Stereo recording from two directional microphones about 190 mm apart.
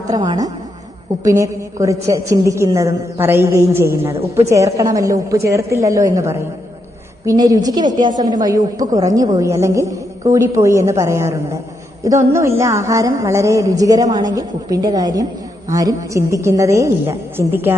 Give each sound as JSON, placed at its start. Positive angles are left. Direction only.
{"t": 0.1, "sound": "a woman's voice", "side_deg": -20}